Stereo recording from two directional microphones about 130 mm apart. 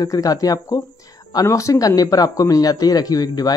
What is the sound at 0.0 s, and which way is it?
Speech, 25° left (ahead or behind).